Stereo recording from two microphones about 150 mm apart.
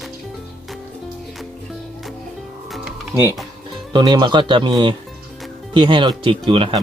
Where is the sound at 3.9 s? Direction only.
30° right (ahead or behind).